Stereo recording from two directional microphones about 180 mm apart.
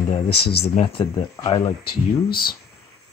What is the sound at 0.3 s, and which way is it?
Speech, 65° left (ahead or behind).